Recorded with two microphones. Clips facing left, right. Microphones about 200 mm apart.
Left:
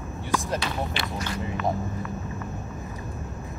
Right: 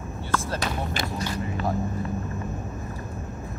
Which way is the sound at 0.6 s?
40° right (ahead or behind).